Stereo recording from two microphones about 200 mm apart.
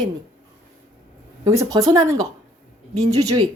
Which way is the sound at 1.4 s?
15° right (ahead or behind).